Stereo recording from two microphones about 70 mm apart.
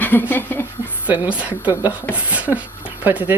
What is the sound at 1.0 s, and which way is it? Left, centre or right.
Speech, right.